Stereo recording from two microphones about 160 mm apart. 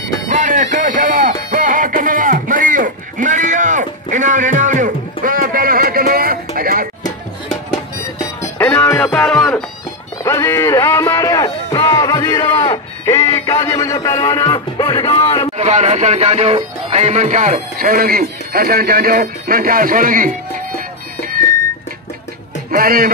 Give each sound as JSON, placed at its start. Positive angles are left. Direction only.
{"t": 0.3, "sound": "music", "side_deg": -55}
{"t": 1.5, "sound": "a sound", "side_deg": -55}
{"t": 7.4, "sound": "music", "side_deg": 0}
{"t": 8.4, "sound": "music", "side_deg": 15}
{"t": 9.0, "sound": "music", "side_deg": 5}
{"t": 10.2, "sound": "a man's voice", "side_deg": 15}
{"t": 15.5, "sound": "speech", "side_deg": -45}
{"t": 22.7, "sound": "a man's voice", "side_deg": -65}